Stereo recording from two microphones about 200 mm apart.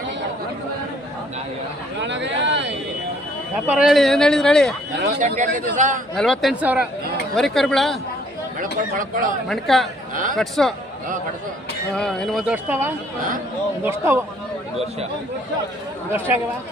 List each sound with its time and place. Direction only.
2.0 s a sound: 65° right (ahead or behind)
3.7 s speech: 5° right (ahead or behind)
5.2 s a man's voice: 40° right (ahead or behind)
6.1 s speech: centre (ahead or behind)
8.6 s speech: 45° right (ahead or behind)
9.5 s speech: centre (ahead or behind)
11.9 s speech: centre (ahead or behind)
13.8 s speech: 10° right (ahead or behind)